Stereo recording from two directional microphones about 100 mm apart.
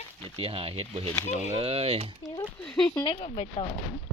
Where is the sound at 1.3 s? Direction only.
85° right.